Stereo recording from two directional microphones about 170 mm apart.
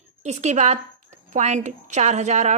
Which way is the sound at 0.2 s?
40° right (ahead or behind).